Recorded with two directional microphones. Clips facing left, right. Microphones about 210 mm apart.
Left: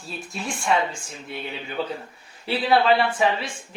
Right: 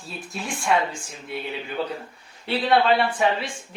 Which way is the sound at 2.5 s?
Centre (ahead or behind).